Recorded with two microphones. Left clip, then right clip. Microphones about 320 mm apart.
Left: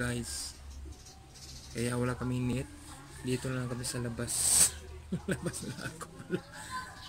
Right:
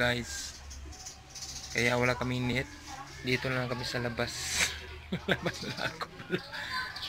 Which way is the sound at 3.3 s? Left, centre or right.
Right.